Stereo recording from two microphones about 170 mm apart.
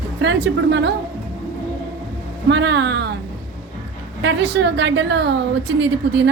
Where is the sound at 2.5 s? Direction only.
90° right.